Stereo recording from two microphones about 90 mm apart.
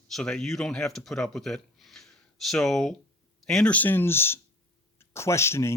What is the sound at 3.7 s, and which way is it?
Speech, 20° left (ahead or behind).